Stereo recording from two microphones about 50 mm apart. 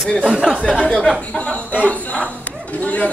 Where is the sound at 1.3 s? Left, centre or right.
Left.